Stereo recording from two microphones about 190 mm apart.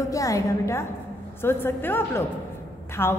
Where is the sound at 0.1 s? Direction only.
15° left (ahead or behind).